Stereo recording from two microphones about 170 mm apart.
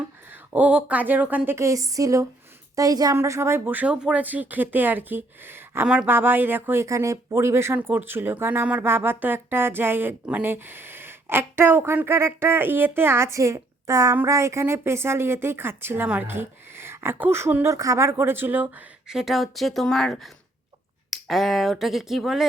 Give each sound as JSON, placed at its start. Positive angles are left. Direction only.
{"t": 0.3, "sound": "speech", "side_deg": -10}